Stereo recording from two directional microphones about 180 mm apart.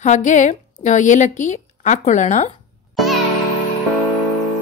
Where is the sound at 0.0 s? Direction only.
40° left (ahead or behind).